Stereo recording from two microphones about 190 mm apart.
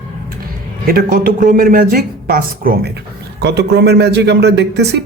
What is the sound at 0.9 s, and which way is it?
A man's voice, 50° right (ahead or behind).